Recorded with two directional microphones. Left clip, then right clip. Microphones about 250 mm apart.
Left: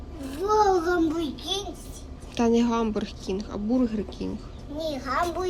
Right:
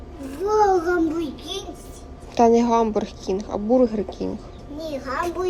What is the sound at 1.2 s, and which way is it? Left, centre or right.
A woman's voice, centre.